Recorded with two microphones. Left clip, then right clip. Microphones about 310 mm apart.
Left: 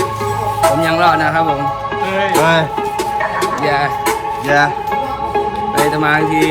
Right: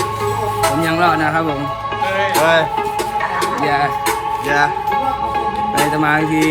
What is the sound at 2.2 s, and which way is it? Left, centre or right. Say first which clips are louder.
Music: left 1 dB; left.